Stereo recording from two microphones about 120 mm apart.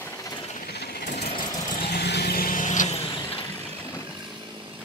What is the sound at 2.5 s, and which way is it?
Vehicle, 90° left.